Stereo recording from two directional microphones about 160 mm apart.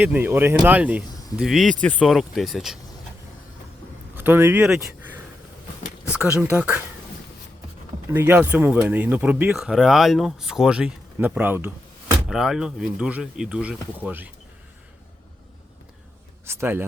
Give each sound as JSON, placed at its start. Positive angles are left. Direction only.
{"t": 0.0, "sound": "speech", "side_deg": -10}
{"t": 4.1, "sound": "speech", "side_deg": -15}
{"t": 8.1, "sound": "speech", "side_deg": -15}
{"t": 16.5, "sound": "speech", "side_deg": -15}